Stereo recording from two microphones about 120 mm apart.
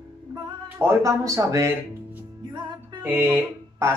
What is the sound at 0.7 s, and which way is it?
Speech, 25° right (ahead or behind).